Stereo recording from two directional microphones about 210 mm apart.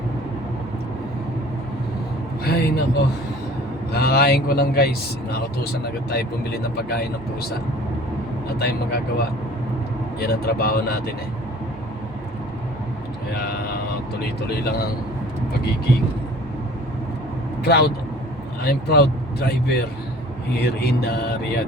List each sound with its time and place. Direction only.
2.5 s a man's voice: 50° left (ahead or behind)
3.9 s a man's voice: 50° left (ahead or behind)
8.5 s a man's voice: 50° left (ahead or behind)
17.6 s a man's voice: 50° left (ahead or behind)